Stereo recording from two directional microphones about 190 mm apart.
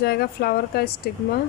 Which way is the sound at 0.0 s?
55° left (ahead or behind).